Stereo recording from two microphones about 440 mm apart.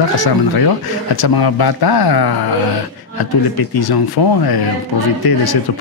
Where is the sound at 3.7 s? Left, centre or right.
Left.